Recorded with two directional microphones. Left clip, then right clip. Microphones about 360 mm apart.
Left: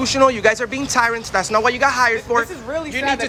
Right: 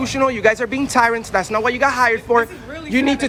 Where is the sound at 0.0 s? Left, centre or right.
Centre.